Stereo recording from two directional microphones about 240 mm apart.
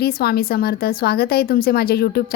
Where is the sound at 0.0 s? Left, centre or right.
Left.